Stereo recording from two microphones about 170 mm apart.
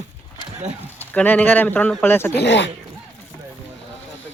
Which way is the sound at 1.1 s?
10° left (ahead or behind).